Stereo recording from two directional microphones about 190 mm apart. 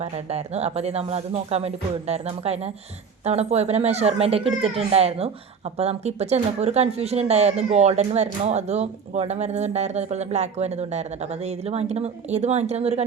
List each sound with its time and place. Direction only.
0.0 s a child's voice: 35° right (ahead or behind)